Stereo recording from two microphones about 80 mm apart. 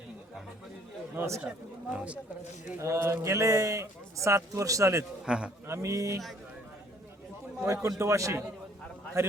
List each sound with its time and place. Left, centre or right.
1.1 s speech: right
1.4 s speech: centre
2.7 s a man's voice: right
5.2 s a man's voice: centre
5.6 s a man's voice: right
7.6 s a man's voice: right